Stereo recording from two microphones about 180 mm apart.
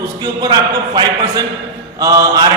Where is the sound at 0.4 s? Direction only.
25° right (ahead or behind).